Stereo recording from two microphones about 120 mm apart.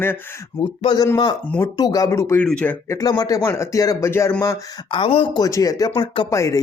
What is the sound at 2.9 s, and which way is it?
Speech, 30° left (ahead or behind).